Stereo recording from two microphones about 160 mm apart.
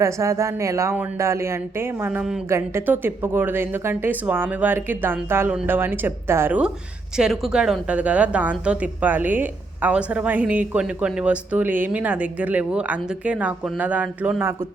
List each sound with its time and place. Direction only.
0.0 s a woman's voice: 20° right (ahead or behind)